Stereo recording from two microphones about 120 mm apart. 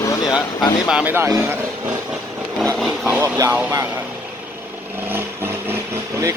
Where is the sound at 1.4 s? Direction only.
15° right (ahead or behind).